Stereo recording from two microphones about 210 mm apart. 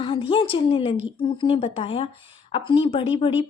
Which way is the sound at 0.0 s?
25° left (ahead or behind).